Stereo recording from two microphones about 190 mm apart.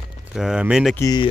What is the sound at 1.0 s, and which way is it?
Speech, 20° left (ahead or behind).